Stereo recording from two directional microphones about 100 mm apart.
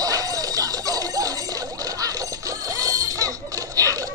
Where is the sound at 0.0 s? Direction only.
35° right (ahead or behind).